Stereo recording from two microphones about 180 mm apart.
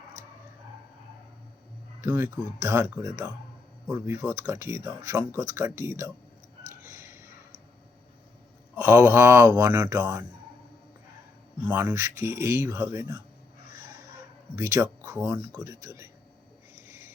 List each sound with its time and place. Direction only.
2.0 s speech: 15° right (ahead or behind)
6.8 s a sound: 15° right (ahead or behind)
8.7 s speech: 15° right (ahead or behind)
11.7 s speech: 10° right (ahead or behind)
14.5 s speech: 15° right (ahead or behind)